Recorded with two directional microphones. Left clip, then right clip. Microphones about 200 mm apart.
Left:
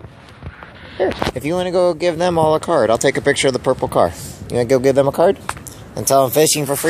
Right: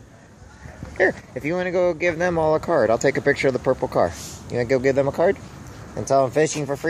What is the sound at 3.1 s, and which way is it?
Speech, 10° left (ahead or behind).